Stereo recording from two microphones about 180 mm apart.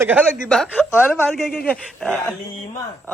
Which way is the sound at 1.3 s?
Centre (ahead or behind).